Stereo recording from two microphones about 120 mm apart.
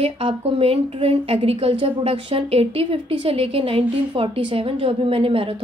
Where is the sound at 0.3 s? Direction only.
55° right (ahead or behind).